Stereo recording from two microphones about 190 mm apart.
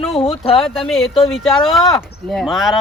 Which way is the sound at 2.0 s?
Centre (ahead or behind).